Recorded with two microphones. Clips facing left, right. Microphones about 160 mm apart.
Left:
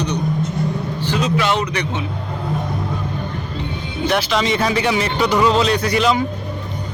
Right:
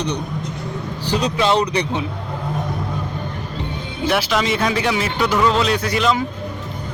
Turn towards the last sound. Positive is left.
turn(degrees=0)  # may be behind; listen again after turning